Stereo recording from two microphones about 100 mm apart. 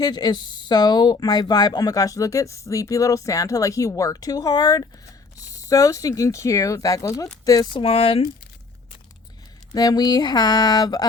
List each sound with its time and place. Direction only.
0.0 s speech: 45° left (ahead or behind)
7.7 s speech: 65° left (ahead or behind)
9.7 s speech: 40° left (ahead or behind)